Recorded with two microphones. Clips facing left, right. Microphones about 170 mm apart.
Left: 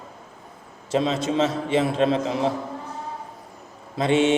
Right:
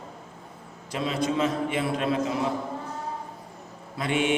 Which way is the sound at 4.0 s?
25° left (ahead or behind).